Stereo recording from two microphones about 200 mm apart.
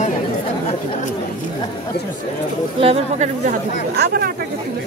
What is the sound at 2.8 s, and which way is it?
Speech, 35° right (ahead or behind).